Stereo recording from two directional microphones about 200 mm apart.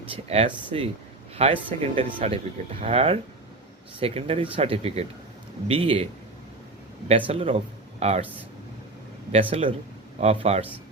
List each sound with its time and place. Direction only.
0.1 s speech: 25° right (ahead or behind)
7.3 s speech: 30° right (ahead or behind)
9.3 s speech: 25° right (ahead or behind)